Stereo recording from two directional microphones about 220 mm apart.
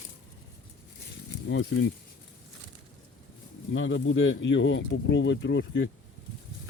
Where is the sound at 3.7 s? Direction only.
60° left (ahead or behind).